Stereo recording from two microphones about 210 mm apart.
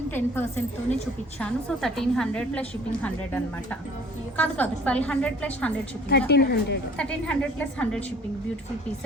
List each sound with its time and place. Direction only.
0.1 s a woman's voice: 10° left (ahead or behind)
6.1 s a woman's voice: 50° left (ahead or behind)
6.9 s a woman's voice: 5° left (ahead or behind)